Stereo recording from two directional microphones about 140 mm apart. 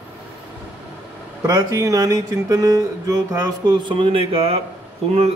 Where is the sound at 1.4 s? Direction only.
25° right (ahead or behind); by 4.6 s 45° right (ahead or behind).